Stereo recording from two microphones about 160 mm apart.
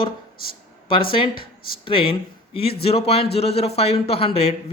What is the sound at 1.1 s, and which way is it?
Speech, 30° left (ahead or behind).